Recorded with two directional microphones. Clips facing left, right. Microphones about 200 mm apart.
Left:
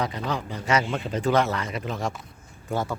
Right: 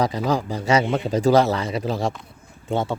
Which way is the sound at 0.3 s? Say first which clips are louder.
Right 6 dB; 35° right (ahead or behind).